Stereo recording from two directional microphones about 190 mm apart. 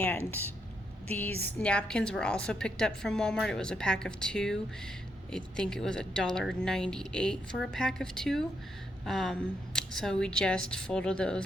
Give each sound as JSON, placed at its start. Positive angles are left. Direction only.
{"t": 1.1, "sound": "a woman's voice", "side_deg": 10}